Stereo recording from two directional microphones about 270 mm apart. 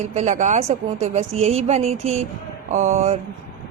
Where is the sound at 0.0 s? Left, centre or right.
Right.